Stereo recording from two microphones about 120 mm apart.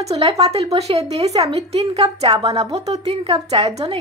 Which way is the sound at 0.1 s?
55° right (ahead or behind).